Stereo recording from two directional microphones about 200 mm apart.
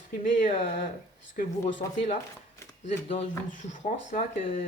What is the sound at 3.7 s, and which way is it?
Speech, 40° left (ahead or behind).